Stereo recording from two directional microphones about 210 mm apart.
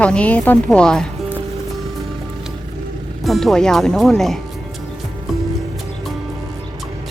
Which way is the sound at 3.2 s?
Centre (ahead or behind).